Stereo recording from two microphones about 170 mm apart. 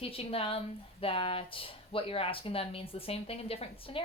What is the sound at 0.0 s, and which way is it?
Speech, 35° left (ahead or behind).